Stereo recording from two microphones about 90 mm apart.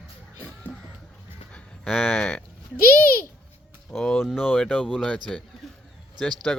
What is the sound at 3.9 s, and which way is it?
Speech, 5° left (ahead or behind).